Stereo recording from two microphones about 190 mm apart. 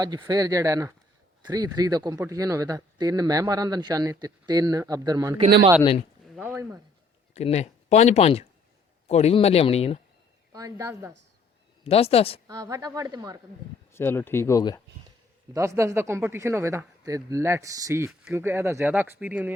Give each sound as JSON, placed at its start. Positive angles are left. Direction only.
{"t": 0.0, "sound": "speech", "side_deg": -20}
{"t": 6.2, "sound": "a sound", "side_deg": 0}
{"t": 7.3, "sound": "speech", "side_deg": 35}
{"t": 10.5, "sound": "speech", "side_deg": -15}
{"t": 11.8, "sound": "speech", "side_deg": 30}
{"t": 12.5, "sound": "speech", "side_deg": -20}
{"t": 13.9, "sound": "speech", "side_deg": 10}
{"t": 15.5, "sound": "speech", "side_deg": -15}